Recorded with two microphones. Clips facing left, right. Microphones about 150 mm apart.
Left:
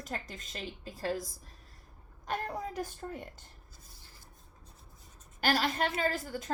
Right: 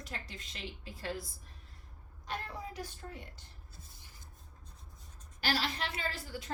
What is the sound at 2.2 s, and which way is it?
A woman's voice, 45° left (ahead or behind).